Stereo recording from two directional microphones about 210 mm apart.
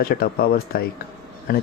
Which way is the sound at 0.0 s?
45° left (ahead or behind).